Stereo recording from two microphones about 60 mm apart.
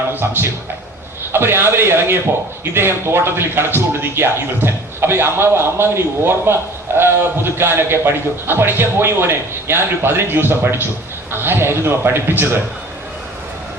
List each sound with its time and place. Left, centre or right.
1.3 s a man's voice: right